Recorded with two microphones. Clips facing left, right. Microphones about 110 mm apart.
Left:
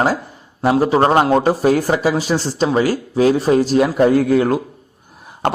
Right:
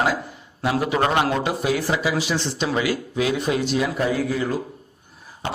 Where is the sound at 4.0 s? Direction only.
55° left (ahead or behind).